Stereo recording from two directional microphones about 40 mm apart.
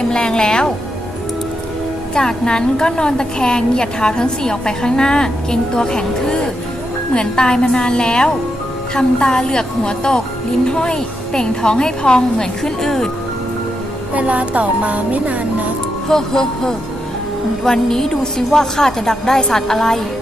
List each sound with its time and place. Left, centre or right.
0.1 s speech: left
2.1 s a woman's voice: centre
14.1 s music: right
16.0 s a woman's voice: centre